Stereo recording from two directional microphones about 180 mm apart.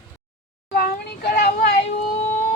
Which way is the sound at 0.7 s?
60° left (ahead or behind).